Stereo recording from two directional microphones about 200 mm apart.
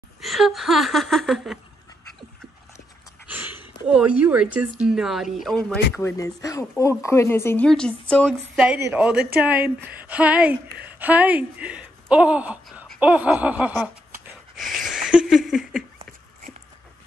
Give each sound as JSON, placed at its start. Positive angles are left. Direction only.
{"t": 0.2, "sound": "a woman's voice", "side_deg": 0}
{"t": 3.3, "sound": "speech", "side_deg": -10}
{"t": 5.9, "sound": "a woman's voice", "side_deg": 15}
{"t": 8.5, "sound": "speech", "side_deg": -10}
{"t": 14.6, "sound": "a sound", "side_deg": 0}